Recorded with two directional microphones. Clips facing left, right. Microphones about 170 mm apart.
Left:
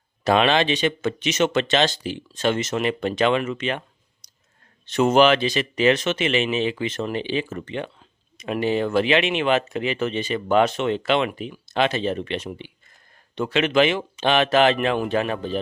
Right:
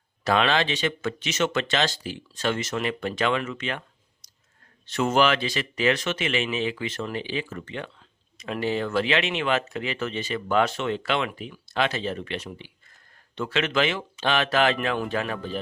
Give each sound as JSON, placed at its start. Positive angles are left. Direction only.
{"t": 0.3, "sound": "speech", "side_deg": 20}